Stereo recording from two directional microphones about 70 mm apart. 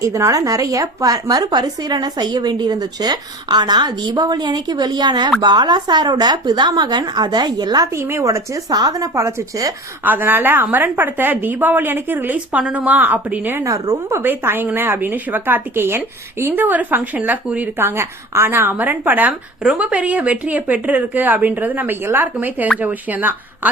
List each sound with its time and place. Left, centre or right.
0.0 s a woman's voice: right
7.9 s speech: right
8.2 s speech: right
10.0 s a woman's voice: right
13.7 s speech: right
14.2 s a woman's voice: right